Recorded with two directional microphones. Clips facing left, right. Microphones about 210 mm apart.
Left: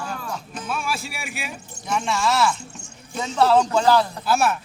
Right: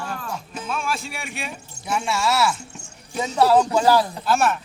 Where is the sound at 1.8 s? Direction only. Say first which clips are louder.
Even; 10° right (ahead or behind).